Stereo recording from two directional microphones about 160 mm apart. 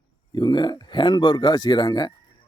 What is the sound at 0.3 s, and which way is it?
Speech, 30° left (ahead or behind).